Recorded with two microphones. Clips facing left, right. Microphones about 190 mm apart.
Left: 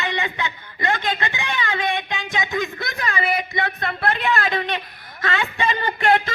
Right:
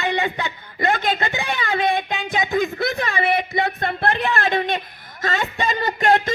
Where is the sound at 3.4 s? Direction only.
25° right (ahead or behind).